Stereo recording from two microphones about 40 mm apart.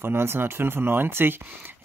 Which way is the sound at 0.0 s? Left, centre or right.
Right.